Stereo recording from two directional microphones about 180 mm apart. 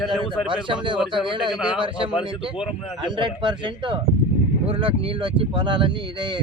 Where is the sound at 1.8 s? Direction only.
30° right (ahead or behind).